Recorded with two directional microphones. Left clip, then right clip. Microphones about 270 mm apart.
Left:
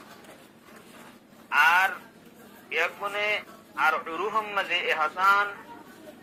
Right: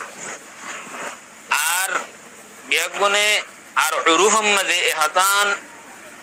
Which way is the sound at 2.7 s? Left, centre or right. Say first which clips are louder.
Right 10 dB; right.